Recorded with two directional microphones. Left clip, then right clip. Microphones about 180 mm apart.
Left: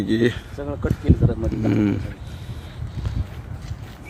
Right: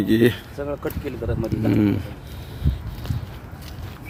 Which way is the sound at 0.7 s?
55° left (ahead or behind).